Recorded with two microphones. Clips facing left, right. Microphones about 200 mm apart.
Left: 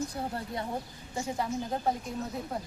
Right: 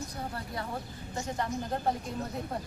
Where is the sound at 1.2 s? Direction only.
5° left (ahead or behind).